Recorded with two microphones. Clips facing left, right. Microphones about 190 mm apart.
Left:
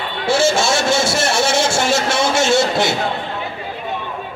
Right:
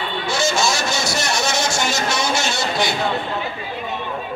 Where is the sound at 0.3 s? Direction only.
30° left (ahead or behind).